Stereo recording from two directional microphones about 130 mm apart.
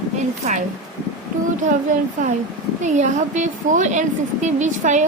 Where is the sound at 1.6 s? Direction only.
80° right.